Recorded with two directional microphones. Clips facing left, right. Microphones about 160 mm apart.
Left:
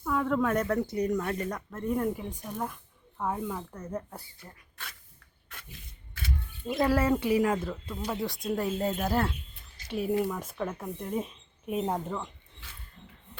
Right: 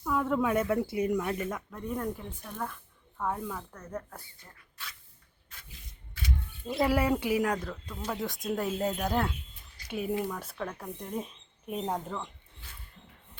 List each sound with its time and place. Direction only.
0.0 s speech: 5° right (ahead or behind)
6.8 s speech: 15° right (ahead or behind)
7.3 s speech: centre (ahead or behind)
12.6 s a sound: 80° left